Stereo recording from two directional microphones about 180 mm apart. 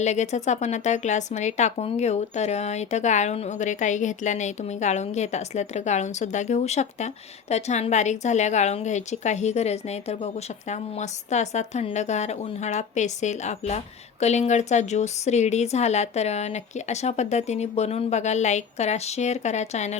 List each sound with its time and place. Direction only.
0.0 s a woman's voice: 40° left (ahead or behind)